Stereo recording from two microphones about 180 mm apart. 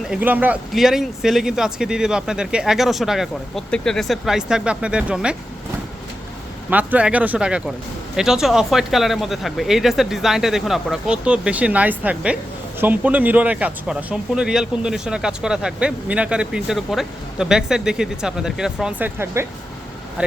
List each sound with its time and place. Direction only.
0.1 s speech: 10° right (ahead or behind)
6.7 s speech: 10° right (ahead or behind)